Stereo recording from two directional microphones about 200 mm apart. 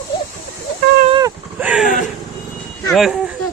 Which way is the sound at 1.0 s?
20° right (ahead or behind).